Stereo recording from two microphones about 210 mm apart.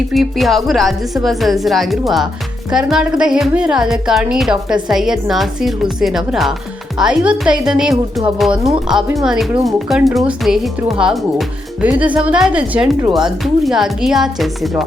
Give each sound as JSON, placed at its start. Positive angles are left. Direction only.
{"t": 0.1, "sound": "a woman's voice", "side_deg": 0}
{"t": 13.0, "sound": "speech", "side_deg": -20}
{"t": 13.4, "sound": "a woman's voice", "side_deg": 0}